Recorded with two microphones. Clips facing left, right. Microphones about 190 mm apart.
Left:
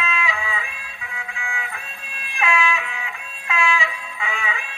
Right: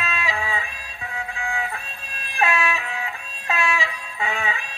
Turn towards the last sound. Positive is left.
turn(degrees=-40)  # may be behind; listen again after turning